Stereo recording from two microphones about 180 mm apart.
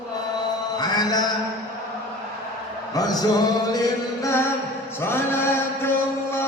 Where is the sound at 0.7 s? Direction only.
20° left (ahead or behind).